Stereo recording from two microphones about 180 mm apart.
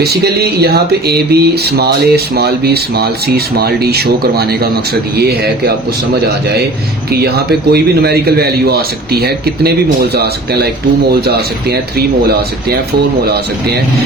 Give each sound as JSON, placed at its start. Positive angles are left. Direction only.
{"t": 0.0, "sound": "speech", "side_deg": -60}
{"t": 7.1, "sound": "speech", "side_deg": -60}